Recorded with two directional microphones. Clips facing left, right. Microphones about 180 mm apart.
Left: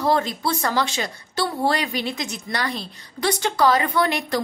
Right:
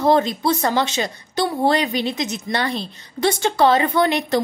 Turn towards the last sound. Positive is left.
turn(degrees=-25)  # may be behind; listen again after turning